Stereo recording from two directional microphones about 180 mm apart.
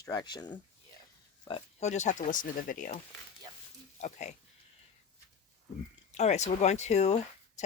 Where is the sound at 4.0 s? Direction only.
40° left (ahead or behind).